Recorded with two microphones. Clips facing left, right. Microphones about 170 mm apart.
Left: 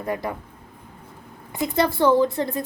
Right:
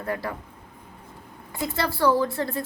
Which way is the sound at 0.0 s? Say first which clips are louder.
Left 3 dB; 20° left (ahead or behind).